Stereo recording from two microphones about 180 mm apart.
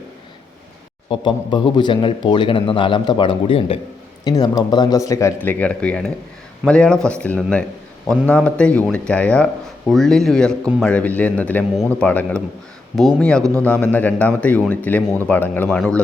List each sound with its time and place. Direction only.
1.1 s a man's voice: 25° left (ahead or behind); by 16.0 s 5° left (ahead or behind)